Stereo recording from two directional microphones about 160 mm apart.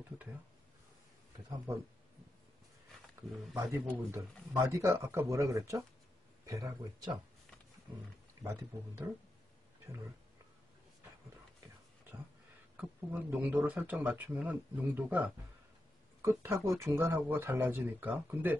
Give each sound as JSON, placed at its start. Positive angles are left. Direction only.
{"t": 3.5, "sound": "speech", "side_deg": -10}
{"t": 8.4, "sound": "speech", "side_deg": -15}
{"t": 12.7, "sound": "speech", "side_deg": -10}